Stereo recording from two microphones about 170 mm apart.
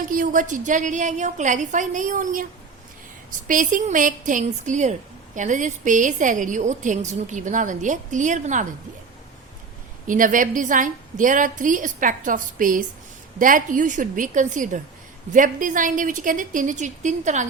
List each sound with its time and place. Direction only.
0.1 s a woman's voice: 55° right (ahead or behind)
10.1 s a woman's voice: 50° right (ahead or behind)